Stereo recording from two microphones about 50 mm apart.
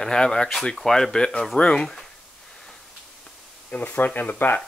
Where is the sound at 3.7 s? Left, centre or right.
Left.